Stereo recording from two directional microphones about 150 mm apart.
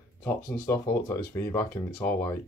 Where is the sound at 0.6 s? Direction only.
20° left (ahead or behind).